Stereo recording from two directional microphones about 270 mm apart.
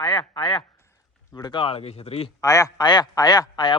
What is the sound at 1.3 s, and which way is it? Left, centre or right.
A man's voice, centre.